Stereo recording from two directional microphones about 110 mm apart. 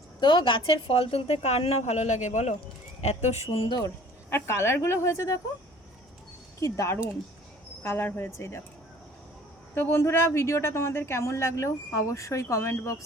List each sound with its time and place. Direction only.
0.2 s a woman's voice: 45° left (ahead or behind); by 3.3 s 90° left
3.7 s speech: 40° left (ahead or behind)
4.3 s speech: 25° left (ahead or behind)
6.6 s speech: 30° left (ahead or behind)
9.7 s speech: 20° left (ahead or behind)